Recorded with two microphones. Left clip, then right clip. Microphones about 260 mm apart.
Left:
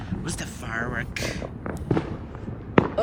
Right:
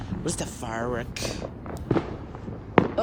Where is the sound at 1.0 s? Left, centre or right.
Centre.